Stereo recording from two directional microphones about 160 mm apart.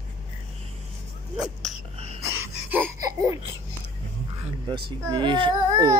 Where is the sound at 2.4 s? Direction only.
10° right (ahead or behind).